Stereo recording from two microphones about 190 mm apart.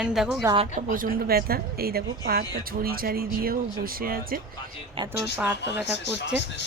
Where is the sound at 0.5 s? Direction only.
35° right (ahead or behind).